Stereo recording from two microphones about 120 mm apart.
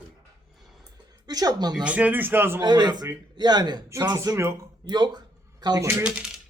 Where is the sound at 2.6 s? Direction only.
35° right (ahead or behind).